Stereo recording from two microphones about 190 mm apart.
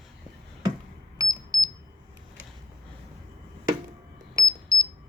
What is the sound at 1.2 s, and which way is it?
Alarm, 20° right (ahead or behind).